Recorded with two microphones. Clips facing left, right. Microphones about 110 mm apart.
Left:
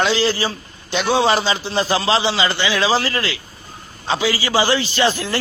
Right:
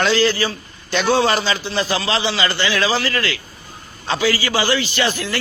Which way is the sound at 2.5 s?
15° left (ahead or behind).